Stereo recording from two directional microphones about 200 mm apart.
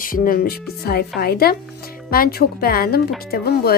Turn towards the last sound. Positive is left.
turn(degrees=50)  # may be behind; listen again after turning